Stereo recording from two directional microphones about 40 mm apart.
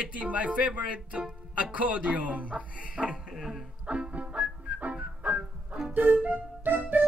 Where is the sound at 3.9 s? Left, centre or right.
Right.